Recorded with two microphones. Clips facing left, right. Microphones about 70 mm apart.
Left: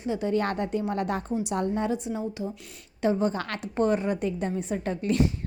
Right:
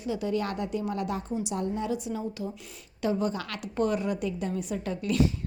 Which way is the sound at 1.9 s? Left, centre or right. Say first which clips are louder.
Left 2 dB; left.